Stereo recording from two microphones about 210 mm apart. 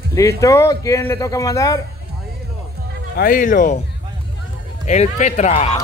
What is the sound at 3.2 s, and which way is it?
Speech, 40° left (ahead or behind).